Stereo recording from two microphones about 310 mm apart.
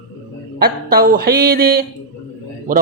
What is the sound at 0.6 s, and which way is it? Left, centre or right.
Speech, right.